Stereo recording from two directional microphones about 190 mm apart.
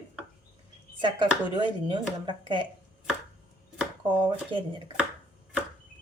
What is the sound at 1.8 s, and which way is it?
Speech, 25° right (ahead or behind).